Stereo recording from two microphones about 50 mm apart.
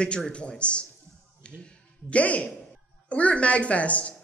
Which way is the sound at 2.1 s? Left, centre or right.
Left.